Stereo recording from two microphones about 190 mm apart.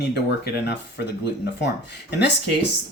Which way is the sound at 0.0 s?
60° left (ahead or behind).